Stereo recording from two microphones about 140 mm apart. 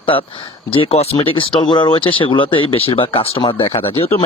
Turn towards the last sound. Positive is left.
turn(degrees=40)  # may be behind; listen again after turning